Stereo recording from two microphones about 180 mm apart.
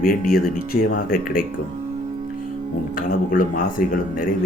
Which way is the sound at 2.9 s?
50° left (ahead or behind).